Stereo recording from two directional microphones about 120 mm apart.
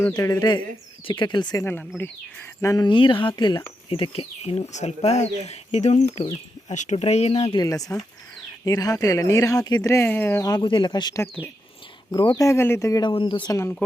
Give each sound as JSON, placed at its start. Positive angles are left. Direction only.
{"t": 0.2, "sound": "speech", "side_deg": 30}
{"t": 2.0, "sound": "speech", "side_deg": 20}
{"t": 2.8, "sound": "speech", "side_deg": 45}
{"t": 3.8, "sound": "speech", "side_deg": 50}
{"t": 6.7, "sound": "speech", "side_deg": 75}
{"t": 7.5, "sound": "speech", "side_deg": 30}
{"t": 10.6, "sound": "speech", "side_deg": 45}
{"t": 12.5, "sound": "speech", "side_deg": 20}
{"t": 13.1, "sound": "speech", "side_deg": 45}
{"t": 13.5, "sound": "speech", "side_deg": 25}